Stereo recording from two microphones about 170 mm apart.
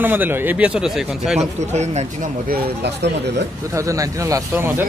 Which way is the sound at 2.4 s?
70° right (ahead or behind).